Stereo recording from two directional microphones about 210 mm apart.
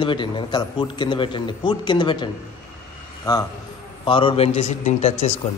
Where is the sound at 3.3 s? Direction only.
20° left (ahead or behind).